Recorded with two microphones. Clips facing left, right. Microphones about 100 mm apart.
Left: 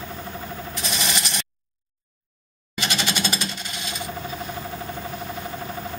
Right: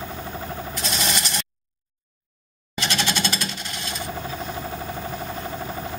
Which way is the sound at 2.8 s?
10° left (ahead or behind).